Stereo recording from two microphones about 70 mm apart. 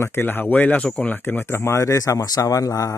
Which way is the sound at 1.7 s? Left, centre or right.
Left.